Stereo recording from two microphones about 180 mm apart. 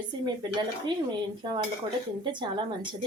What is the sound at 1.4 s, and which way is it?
A woman's voice, 20° right (ahead or behind).